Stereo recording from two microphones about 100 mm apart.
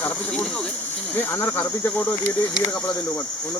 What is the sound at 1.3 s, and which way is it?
Speech, 20° left (ahead or behind).